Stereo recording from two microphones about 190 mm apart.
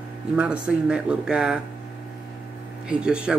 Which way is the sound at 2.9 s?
5° right (ahead or behind).